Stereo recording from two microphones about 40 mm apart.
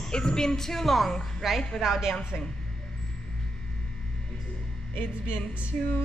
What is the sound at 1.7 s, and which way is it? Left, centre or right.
Speech, centre.